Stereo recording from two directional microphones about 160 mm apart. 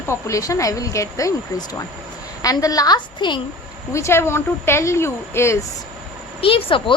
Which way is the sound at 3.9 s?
15° left (ahead or behind).